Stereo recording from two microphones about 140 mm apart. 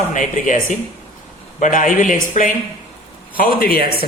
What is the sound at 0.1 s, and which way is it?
Speech, 65° left (ahead or behind).